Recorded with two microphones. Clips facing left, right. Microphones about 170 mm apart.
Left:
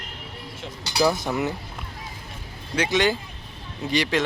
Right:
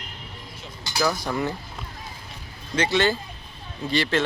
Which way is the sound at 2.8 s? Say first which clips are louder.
Even; 15° left (ahead or behind).